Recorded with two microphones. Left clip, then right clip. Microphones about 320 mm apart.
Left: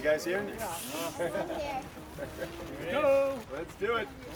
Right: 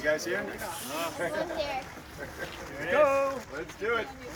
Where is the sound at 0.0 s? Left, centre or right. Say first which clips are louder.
Even; centre.